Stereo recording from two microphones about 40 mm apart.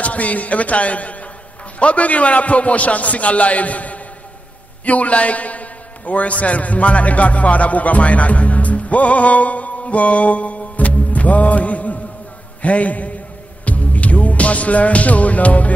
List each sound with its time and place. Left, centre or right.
0.0 s a man's voice: left
13.7 s music: left